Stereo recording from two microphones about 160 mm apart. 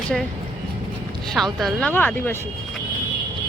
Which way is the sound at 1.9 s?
10° left (ahead or behind).